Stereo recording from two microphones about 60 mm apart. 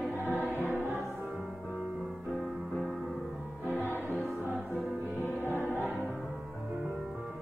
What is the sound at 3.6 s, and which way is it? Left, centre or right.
Music, left.